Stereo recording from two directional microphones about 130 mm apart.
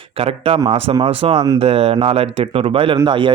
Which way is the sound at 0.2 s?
50° right (ahead or behind).